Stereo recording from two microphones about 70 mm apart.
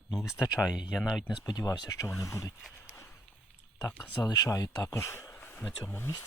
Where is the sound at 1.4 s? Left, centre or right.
Left.